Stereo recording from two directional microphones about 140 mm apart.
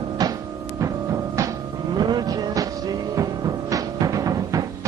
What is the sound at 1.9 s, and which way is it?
Vehicle, 30° right (ahead or behind).